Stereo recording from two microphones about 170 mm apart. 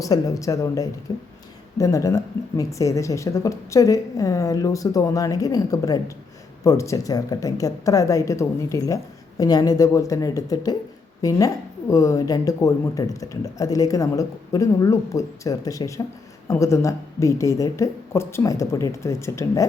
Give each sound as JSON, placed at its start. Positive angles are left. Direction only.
{"t": 0.0, "sound": "a woman's voice", "side_deg": 20}